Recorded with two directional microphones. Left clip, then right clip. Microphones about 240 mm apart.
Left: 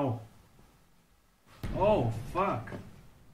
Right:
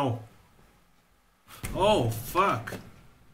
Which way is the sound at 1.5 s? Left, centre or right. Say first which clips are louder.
Right 3 dB; right.